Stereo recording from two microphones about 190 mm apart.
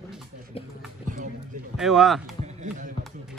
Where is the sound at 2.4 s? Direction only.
40° right (ahead or behind).